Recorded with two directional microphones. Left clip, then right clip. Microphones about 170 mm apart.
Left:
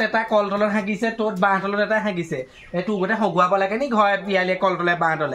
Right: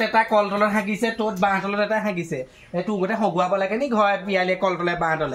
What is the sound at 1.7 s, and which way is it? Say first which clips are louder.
Speech: left 1 dB; 10° left (ahead or behind).